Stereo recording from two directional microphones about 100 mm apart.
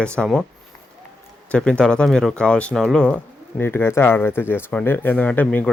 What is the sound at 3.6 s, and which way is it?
Speech, 25° left (ahead or behind).